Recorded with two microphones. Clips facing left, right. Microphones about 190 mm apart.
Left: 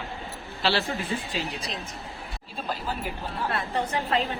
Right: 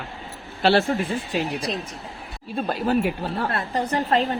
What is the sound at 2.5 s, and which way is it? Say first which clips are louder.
Speech: right 10 dB; 65° right (ahead or behind).